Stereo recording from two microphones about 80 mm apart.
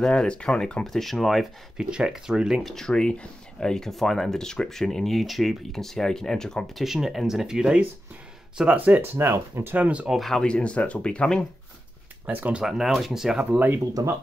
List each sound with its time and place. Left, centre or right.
0.0 s speech: centre
2.7 s speech: centre
9.1 s speech: right; by 10.1 s centre
10.1 s speech: centre
10.4 s speech: centre
12.3 s speech: right
12.6 s speech: centre
13.4 s speech: right